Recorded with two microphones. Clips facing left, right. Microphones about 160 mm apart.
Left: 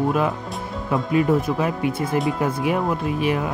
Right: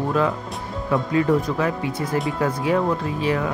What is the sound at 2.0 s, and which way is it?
Speech, 10° left (ahead or behind).